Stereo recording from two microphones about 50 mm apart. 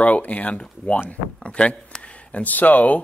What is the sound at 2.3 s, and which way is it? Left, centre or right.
Speech, left.